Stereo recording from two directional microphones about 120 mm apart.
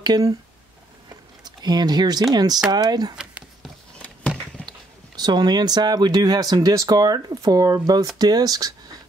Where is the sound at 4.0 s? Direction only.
10° left (ahead or behind).